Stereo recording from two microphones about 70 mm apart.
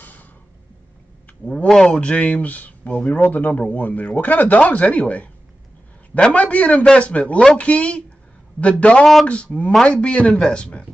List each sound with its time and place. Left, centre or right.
0.0 s a sound: left
1.4 s a man's voice: centre
9.0 s speech: centre
9.3 s a man's voice: centre